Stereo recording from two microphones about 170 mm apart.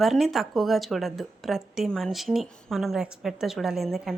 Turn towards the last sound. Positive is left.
turn(degrees=0)  # may be behind; listen again after turning